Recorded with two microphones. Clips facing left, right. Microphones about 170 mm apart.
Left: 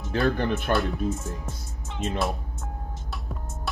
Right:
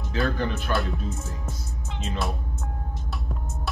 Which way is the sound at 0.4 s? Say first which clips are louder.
Left 3 dB; 55° left (ahead or behind).